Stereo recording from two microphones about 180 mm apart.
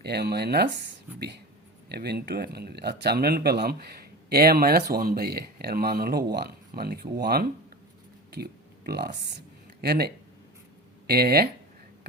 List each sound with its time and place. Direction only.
0.0 s speech: 65° right (ahead or behind)
1.9 s speech: 65° right (ahead or behind)